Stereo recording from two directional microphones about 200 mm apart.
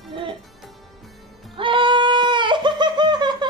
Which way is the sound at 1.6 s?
25° right (ahead or behind).